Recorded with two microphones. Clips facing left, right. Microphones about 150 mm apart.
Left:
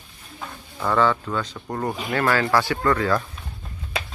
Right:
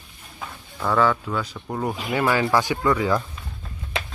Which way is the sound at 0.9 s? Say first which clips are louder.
Even; 5° right (ahead or behind).